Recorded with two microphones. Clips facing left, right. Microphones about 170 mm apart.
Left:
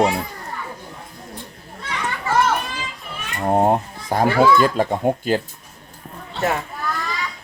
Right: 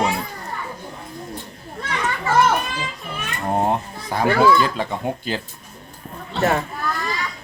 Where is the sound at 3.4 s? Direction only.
35° left (ahead or behind).